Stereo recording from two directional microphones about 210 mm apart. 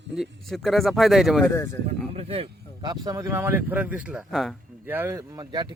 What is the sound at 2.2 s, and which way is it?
Speech, 30° right (ahead or behind).